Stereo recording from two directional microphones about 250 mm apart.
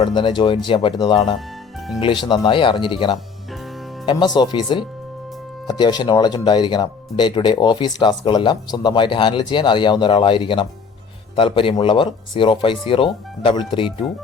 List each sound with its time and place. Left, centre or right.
0.0 s speech: centre